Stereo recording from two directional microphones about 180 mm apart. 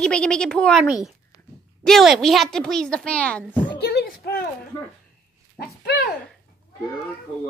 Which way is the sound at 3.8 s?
60° left (ahead or behind).